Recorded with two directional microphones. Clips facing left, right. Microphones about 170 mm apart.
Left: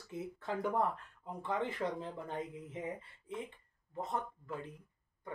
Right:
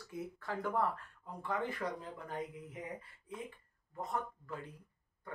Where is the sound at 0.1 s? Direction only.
20° left (ahead or behind).